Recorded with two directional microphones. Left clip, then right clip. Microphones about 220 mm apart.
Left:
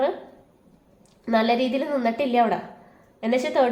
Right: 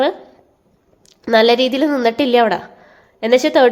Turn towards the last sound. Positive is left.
turn(degrees=-50)  # may be behind; listen again after turning